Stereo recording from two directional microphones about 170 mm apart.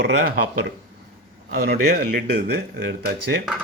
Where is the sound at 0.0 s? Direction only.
85° right.